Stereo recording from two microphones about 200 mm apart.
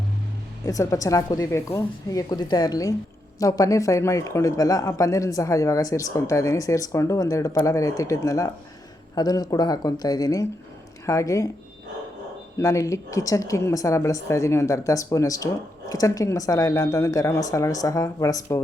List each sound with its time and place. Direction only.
0.6 s speech: 15° left (ahead or behind)
12.5 s speech: 15° left (ahead or behind)